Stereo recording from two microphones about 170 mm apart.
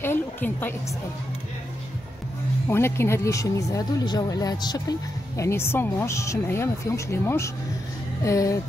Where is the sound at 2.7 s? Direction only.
15° left (ahead or behind).